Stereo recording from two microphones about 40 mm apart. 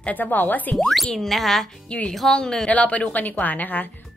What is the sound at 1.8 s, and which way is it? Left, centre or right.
Speech, left.